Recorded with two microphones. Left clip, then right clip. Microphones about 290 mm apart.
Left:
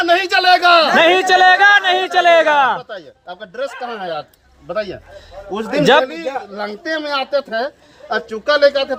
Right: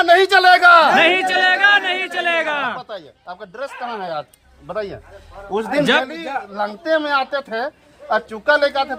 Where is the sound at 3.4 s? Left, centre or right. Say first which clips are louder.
Left 4 dB; centre.